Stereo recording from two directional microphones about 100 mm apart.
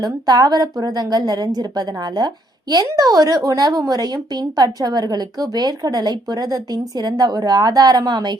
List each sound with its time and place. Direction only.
0.0 s a woman's voice: 40° right (ahead or behind)